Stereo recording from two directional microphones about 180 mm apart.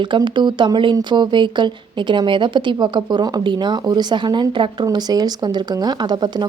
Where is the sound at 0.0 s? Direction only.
25° right (ahead or behind).